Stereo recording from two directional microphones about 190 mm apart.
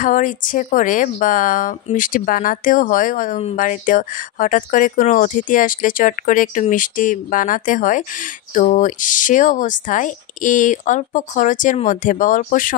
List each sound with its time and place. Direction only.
0.0 s speech: 45° left (ahead or behind)